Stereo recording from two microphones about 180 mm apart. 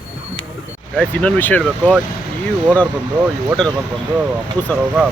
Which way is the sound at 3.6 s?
5° left (ahead or behind).